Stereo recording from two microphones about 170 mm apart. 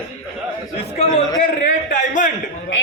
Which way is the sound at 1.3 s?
50° left (ahead or behind).